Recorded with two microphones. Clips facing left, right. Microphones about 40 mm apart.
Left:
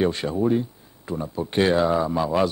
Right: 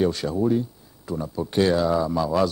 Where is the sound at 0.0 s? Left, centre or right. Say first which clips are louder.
Even; left.